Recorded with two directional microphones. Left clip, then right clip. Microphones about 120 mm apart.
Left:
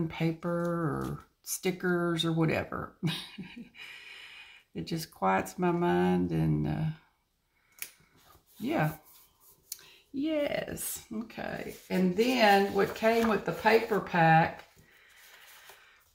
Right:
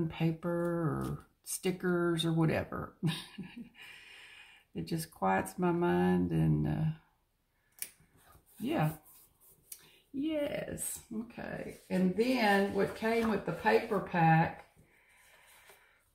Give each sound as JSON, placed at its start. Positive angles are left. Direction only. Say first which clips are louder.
{"t": 0.1, "sound": "speech", "louder": "left 3 dB", "side_deg": 20}
{"t": 8.6, "sound": "speech", "louder": "left 3 dB", "side_deg": 20}
{"t": 10.2, "sound": "speech", "louder": "left 4 dB", "side_deg": 30}